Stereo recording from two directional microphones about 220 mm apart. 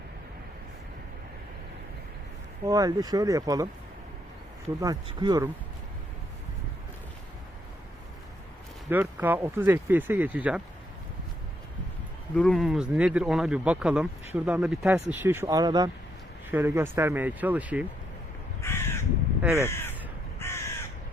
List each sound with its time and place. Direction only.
2.6 s speech: 15° right (ahead or behind)
4.8 s speech: 20° right (ahead or behind)
8.9 s speech: 10° right (ahead or behind)
12.3 s speech: 5° left (ahead or behind)
18.6 s crow: 10° left (ahead or behind)
19.4 s crow: 10° right (ahead or behind)
19.6 s crow: 10° left (ahead or behind)